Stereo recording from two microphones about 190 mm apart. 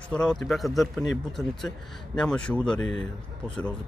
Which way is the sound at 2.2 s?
5° left (ahead or behind).